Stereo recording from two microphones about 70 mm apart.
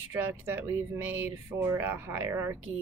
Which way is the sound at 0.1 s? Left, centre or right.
Right.